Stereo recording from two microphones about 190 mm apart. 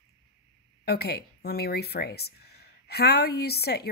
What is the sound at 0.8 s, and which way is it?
A woman's voice, 55° left (ahead or behind).